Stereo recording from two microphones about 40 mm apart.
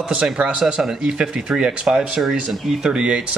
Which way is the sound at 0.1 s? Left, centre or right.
Right.